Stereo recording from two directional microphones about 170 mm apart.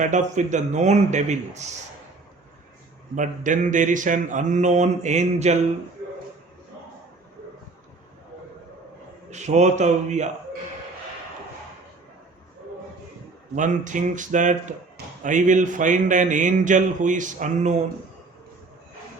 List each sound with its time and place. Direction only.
0.0 s speech: 45° right (ahead or behind)
3.2 s speech: 50° right (ahead or behind)
9.3 s speech: 45° right (ahead or behind)
13.6 s speech: 50° right (ahead or behind)